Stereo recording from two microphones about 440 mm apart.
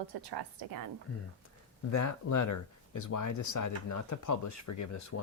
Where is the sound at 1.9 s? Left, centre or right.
Left.